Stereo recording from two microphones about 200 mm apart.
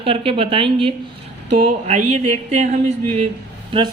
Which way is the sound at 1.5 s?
40° right (ahead or behind).